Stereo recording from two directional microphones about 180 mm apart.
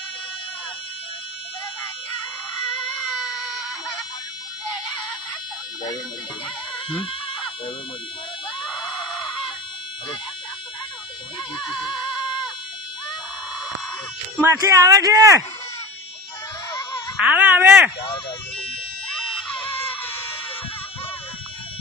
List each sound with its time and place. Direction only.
6.9 s speech: 30° left (ahead or behind)
11.5 s music: 5° left (ahead or behind)
14.3 s speech: 15° right (ahead or behind)
17.2 s speech: 5° right (ahead or behind)
19.1 s screaming: 5° left (ahead or behind)